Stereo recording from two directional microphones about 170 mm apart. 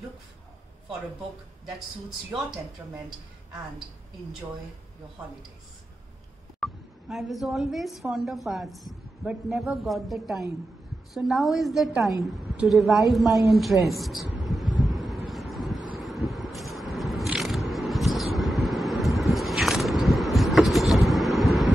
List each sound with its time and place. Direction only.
2.8 s a woman's voice: 15° right (ahead or behind)
6.6 s a woman's voice: centre (ahead or behind)
14.4 s vehicle: centre (ahead or behind)
14.8 s a sound: centre (ahead or behind)
16.0 s scrape: centre (ahead or behind)